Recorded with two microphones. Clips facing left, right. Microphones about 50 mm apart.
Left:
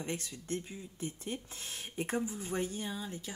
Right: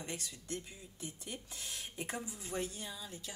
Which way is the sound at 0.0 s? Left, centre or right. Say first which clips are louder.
Left 5 dB; left.